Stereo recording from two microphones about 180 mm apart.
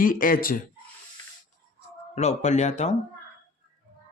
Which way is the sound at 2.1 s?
40° left (ahead or behind).